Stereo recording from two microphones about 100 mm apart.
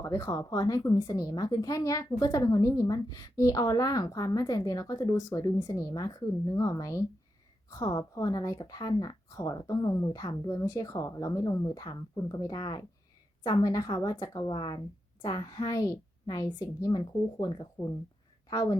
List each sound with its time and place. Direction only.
0.0 s speech: 30° left (ahead or behind)
0.3 s speech: 40° left (ahead or behind)
17.8 s speech: 30° left (ahead or behind)